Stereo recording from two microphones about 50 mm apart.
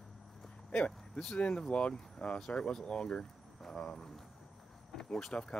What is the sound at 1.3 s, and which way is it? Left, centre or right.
Speech, centre.